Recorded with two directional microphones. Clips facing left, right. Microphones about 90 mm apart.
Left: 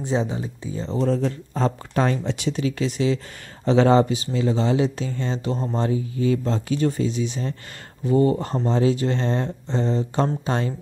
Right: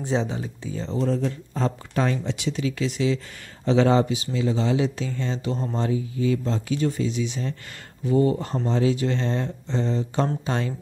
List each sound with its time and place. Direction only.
0.0 s speech: 5° left (ahead or behind)
0.9 s speech: 45° left (ahead or behind)